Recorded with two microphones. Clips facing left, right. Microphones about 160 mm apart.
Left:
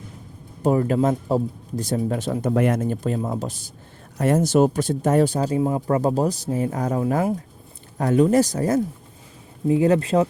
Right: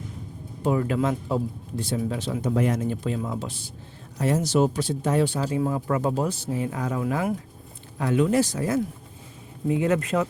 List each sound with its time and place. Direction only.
0.6 s speech: 40° left (ahead or behind)
5.5 s speech: 25° left (ahead or behind)